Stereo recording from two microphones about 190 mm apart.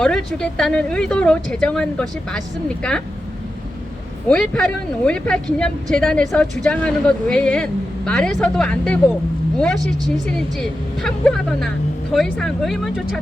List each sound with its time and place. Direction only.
0.0 s speech: 5° left (ahead or behind)
4.3 s speech: 5° left (ahead or behind)